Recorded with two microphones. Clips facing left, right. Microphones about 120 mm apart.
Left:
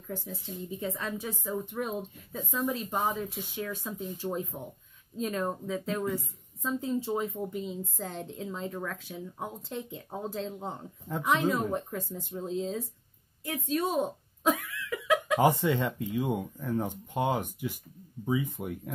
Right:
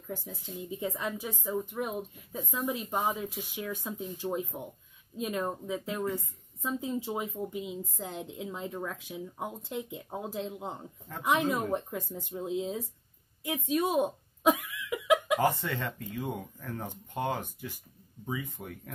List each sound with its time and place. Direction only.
0.1 s a woman's voice: 15° right (ahead or behind)
13.7 s a sound: 15° right (ahead or behind)
15.3 s speech: 15° left (ahead or behind)